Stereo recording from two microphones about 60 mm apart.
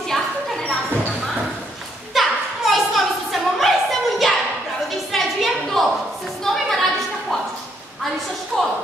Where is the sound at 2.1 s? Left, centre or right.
Centre.